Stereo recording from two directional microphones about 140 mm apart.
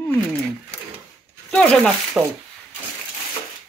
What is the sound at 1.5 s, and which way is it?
Speech, 5° left (ahead or behind).